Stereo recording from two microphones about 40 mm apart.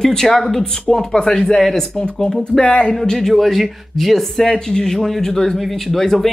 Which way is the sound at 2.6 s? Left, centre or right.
Left.